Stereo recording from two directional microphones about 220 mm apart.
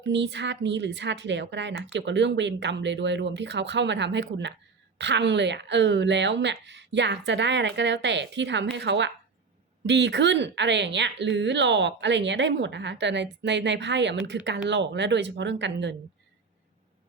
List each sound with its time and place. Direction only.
0.0 s a woman's voice: 55° right (ahead or behind)